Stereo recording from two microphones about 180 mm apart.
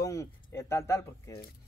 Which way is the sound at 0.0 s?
15° left (ahead or behind).